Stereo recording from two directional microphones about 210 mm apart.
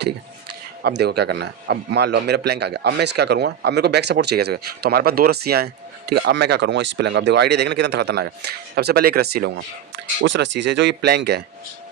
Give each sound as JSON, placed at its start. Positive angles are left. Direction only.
{"t": 0.9, "sound": "a man's voice", "side_deg": -50}